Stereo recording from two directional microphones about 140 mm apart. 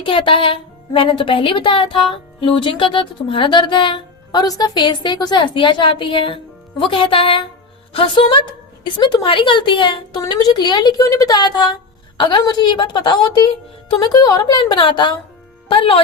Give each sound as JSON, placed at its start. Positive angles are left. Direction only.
{"t": 0.0, "sound": "a woman's voice", "side_deg": 35}